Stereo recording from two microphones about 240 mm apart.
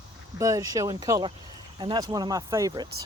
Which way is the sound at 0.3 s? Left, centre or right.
Centre.